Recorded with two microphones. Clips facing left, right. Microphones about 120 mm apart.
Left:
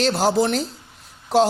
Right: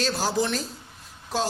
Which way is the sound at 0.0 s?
65° left (ahead or behind).